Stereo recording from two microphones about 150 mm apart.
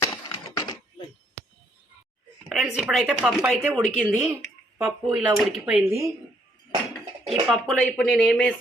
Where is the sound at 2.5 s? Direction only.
5° right (ahead or behind).